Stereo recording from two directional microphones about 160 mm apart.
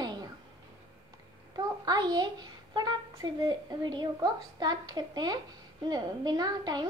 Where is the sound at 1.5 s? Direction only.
25° right (ahead or behind).